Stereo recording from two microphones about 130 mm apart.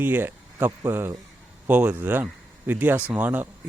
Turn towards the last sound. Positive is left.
turn(degrees=-15)  # may be behind; listen again after turning